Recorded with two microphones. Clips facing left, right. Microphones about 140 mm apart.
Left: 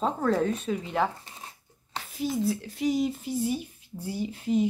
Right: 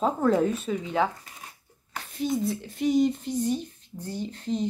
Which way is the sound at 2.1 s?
Centre (ahead or behind).